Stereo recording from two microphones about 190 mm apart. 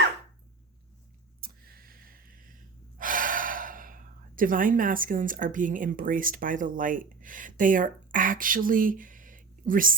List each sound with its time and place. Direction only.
1.4 s gasp: 50° right (ahead or behind)